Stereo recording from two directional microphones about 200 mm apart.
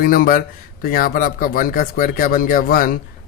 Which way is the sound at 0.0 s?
45° left (ahead or behind).